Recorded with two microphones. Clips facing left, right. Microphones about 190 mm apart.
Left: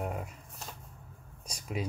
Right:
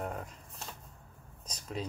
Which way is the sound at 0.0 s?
10° left (ahead or behind).